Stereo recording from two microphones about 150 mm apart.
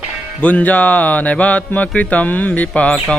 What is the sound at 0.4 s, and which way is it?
Speech, 10° left (ahead or behind).